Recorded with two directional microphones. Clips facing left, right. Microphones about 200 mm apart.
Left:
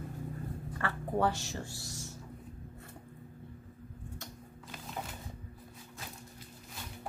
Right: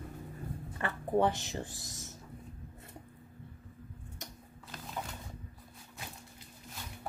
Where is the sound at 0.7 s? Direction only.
20° right (ahead or behind).